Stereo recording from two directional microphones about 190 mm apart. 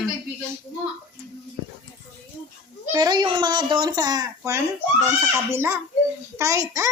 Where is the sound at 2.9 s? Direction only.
20° right (ahead or behind).